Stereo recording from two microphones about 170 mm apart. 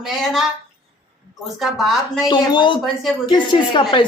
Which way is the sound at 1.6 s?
Centre (ahead or behind).